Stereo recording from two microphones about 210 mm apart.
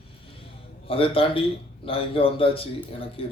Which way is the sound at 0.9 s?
25° left (ahead or behind).